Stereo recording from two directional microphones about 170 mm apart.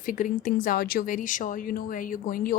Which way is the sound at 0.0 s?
50° left (ahead or behind).